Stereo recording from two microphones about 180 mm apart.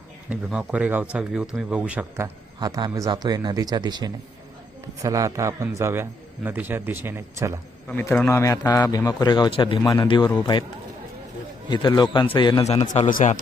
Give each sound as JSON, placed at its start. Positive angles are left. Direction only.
{"t": 0.3, "sound": "a man's voice", "side_deg": -5}
{"t": 7.9, "sound": "a man's voice", "side_deg": 5}
{"t": 11.7, "sound": "a man's voice", "side_deg": 25}
{"t": 12.6, "sound": "speech", "side_deg": 40}